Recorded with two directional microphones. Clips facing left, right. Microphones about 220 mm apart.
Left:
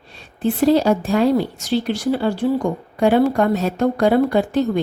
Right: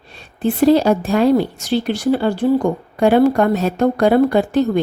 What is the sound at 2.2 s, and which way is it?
A woman's voice, 55° right (ahead or behind).